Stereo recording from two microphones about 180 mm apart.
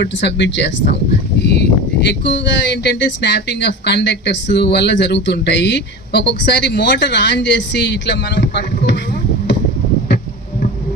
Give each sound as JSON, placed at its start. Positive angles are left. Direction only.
{"t": 0.0, "sound": "speech", "side_deg": 75}